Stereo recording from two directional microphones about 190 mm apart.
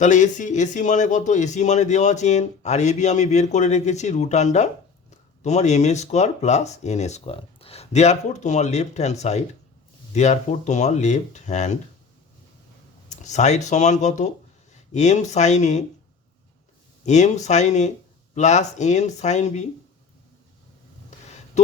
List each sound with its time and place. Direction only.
0.0 s speech: 40° left (ahead or behind)
13.1 s speech: 40° left (ahead or behind)
17.1 s speech: 40° left (ahead or behind)